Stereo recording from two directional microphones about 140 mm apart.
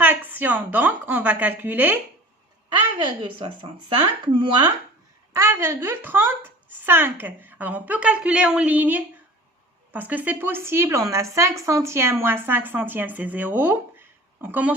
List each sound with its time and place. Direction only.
0.0 s speech: 10° right (ahead or behind)
2.6 s speech: 35° right (ahead or behind)
5.3 s speech: 20° right (ahead or behind)